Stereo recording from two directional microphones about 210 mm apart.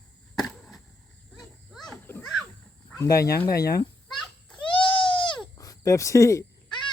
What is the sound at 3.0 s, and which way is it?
Speech, 15° left (ahead or behind).